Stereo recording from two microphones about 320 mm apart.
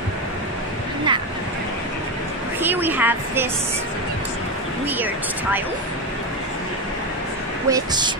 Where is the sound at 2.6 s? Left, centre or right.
Centre.